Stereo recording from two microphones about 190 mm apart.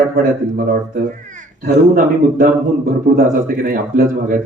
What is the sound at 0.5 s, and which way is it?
A man's voice, 45° right (ahead or behind).